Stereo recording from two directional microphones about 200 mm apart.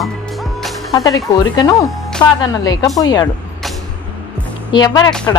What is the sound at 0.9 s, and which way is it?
Speech, 15° left (ahead or behind).